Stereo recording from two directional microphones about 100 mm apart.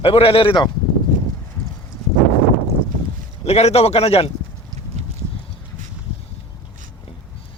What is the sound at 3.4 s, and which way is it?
Speech, 90° left.